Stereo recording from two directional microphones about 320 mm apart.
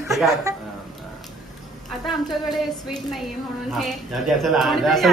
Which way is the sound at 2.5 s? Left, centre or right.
Centre.